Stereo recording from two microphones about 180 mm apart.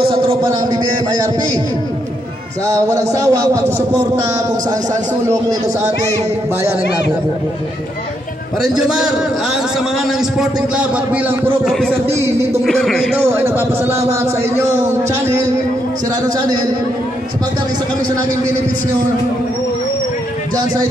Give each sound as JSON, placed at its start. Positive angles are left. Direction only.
{"t": 0.1, "sound": "a man's voice", "side_deg": -30}
{"t": 2.6, "sound": "speech", "side_deg": -15}
{"t": 5.8, "sound": "speech", "side_deg": -40}
{"t": 8.7, "sound": "speech", "side_deg": -5}
{"t": 10.8, "sound": "speech", "side_deg": -10}
{"t": 11.7, "sound": "speech", "side_deg": 5}
{"t": 13.2, "sound": "speech", "side_deg": -15}